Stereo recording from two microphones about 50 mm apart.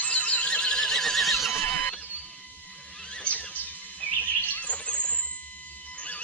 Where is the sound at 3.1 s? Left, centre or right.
Left.